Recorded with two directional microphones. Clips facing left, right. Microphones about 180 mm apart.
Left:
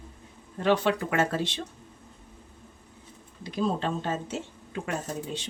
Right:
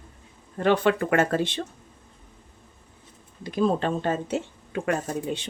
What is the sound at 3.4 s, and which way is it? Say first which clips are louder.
Speech: right 5 dB; 55° right (ahead or behind).